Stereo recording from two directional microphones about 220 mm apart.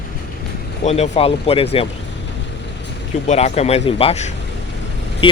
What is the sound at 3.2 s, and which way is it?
Speech, 30° left (ahead or behind).